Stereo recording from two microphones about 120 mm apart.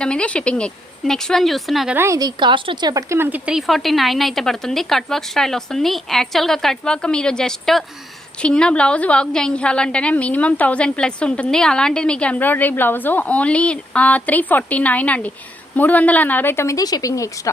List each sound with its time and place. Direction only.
0.0 s speech: 10° left (ahead or behind)
2.0 s a woman's voice: 30° right (ahead or behind)
2.9 s a woman's voice: 20° right (ahead or behind); by 17.5 s 25° left (ahead or behind)